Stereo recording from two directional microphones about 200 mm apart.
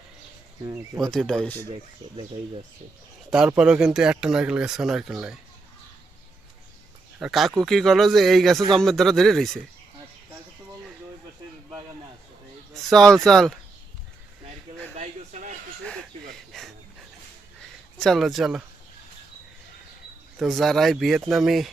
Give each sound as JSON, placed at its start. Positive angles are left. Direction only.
{"t": 0.9, "sound": "speech", "side_deg": 0}
{"t": 1.7, "sound": "speech", "side_deg": -30}
{"t": 3.2, "sound": "speech", "side_deg": -5}
{"t": 7.2, "sound": "speech", "side_deg": 0}
{"t": 12.7, "sound": "speech", "side_deg": 0}
{"t": 14.9, "sound": "a sound", "side_deg": -35}
{"t": 15.8, "sound": "fowl", "side_deg": 5}
{"t": 16.5, "sound": "a sound", "side_deg": 0}
{"t": 17.9, "sound": "speech", "side_deg": 0}
{"t": 20.4, "sound": "speech", "side_deg": 0}